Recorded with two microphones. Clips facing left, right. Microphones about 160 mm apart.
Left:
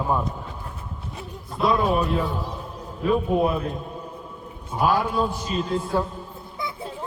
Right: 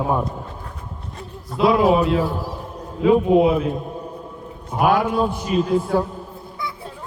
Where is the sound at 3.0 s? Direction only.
90° right.